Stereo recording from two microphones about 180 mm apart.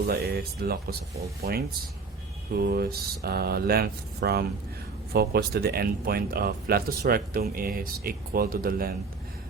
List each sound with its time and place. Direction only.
0.1 s speech: 60° right (ahead or behind)